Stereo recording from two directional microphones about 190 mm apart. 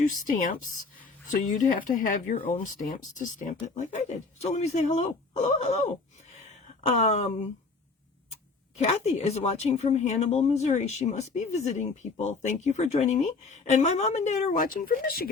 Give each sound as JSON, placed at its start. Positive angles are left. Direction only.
{"t": 0.0, "sound": "speech", "side_deg": 45}
{"t": 6.4, "sound": "a sound", "side_deg": 35}
{"t": 8.3, "sound": "speech", "side_deg": 35}